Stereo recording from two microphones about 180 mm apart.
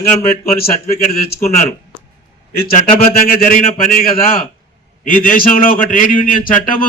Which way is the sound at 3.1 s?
55° left (ahead or behind).